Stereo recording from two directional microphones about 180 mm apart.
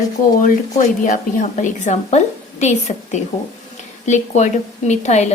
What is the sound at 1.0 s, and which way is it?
A woman's voice, 45° left (ahead or behind).